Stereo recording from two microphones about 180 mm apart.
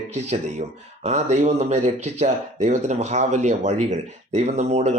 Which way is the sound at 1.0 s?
40° right (ahead or behind).